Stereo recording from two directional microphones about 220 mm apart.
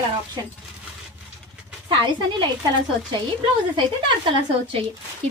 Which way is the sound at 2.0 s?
20° right (ahead or behind).